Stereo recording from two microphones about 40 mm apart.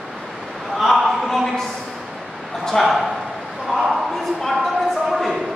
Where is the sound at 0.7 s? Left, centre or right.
Centre.